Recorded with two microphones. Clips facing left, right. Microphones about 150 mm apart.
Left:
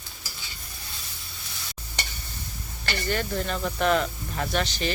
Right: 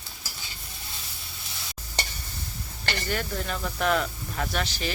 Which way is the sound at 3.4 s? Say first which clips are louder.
Left 3 dB; 5° right (ahead or behind).